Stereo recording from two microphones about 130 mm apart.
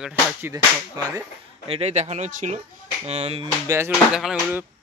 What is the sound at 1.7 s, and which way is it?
Speech, 55° right (ahead or behind).